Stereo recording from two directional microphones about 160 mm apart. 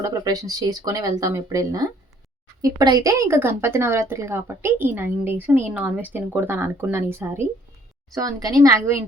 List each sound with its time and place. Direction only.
0.0 s speech: 20° right (ahead or behind)